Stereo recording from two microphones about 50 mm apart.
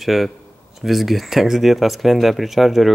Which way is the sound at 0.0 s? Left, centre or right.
Centre.